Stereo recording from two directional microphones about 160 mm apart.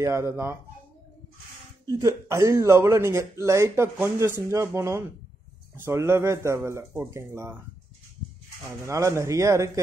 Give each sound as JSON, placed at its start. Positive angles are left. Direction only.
{"t": 0.0, "sound": "speech", "side_deg": -15}
{"t": 1.9, "sound": "speech", "side_deg": -20}
{"t": 8.6, "sound": "speech", "side_deg": -20}